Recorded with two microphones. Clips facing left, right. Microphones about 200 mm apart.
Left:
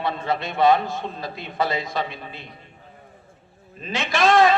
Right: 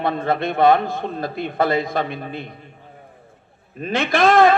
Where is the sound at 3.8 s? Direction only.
55° right (ahead or behind).